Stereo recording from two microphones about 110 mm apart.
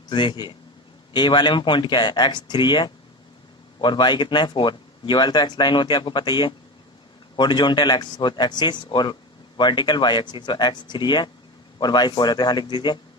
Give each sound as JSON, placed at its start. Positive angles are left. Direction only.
{"t": 0.1, "sound": "a man's voice", "side_deg": 45}